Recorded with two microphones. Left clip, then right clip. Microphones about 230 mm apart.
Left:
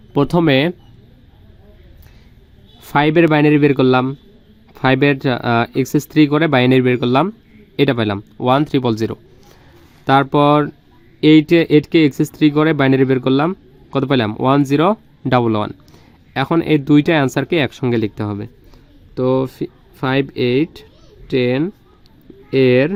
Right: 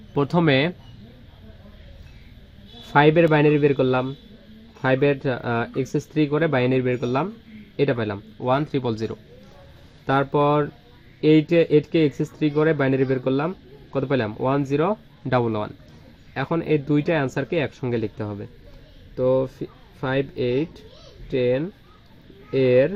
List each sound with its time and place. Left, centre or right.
0.1 s speech: left
2.8 s speech: left